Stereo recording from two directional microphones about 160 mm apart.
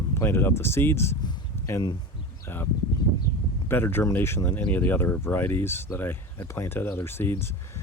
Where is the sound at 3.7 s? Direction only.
15° left (ahead or behind).